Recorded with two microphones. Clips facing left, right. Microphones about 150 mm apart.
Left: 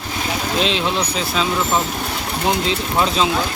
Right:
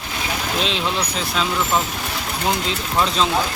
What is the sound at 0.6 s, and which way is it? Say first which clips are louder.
Speech: left 4 dB; centre (ahead or behind).